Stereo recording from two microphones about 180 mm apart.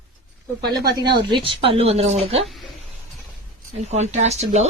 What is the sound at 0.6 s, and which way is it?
Speech, 65° right (ahead or behind).